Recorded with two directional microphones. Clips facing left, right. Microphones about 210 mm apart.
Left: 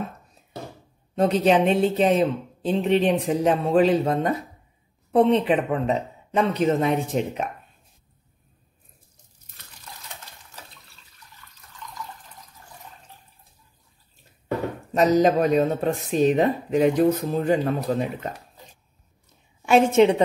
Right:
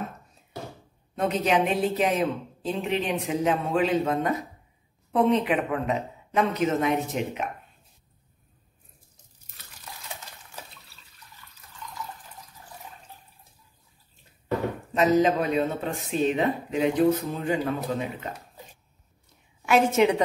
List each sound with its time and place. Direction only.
1.3 s speech: 30° left (ahead or behind)
15.2 s speech: 40° left (ahead or behind)
19.6 s a woman's voice: 30° left (ahead or behind)